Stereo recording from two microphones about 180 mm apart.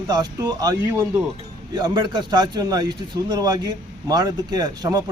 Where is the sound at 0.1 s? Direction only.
20° right (ahead or behind).